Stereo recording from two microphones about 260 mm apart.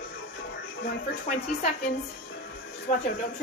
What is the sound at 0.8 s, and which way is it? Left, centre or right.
Speech, left.